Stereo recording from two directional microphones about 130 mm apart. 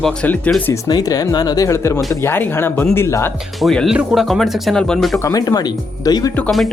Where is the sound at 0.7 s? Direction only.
25° left (ahead or behind).